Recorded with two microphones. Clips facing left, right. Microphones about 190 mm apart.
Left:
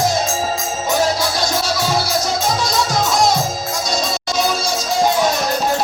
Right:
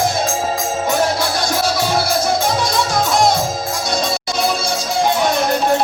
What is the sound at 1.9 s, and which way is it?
Music, 55° right (ahead or behind).